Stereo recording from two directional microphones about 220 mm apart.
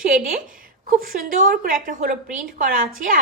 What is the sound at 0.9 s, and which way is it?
A woman's voice, 40° right (ahead or behind).